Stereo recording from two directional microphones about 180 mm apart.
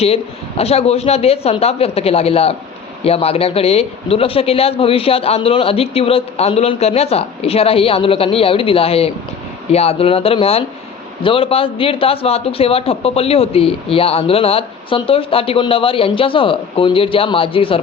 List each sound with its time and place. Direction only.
0.0 s a man's voice: 35° left (ahead or behind)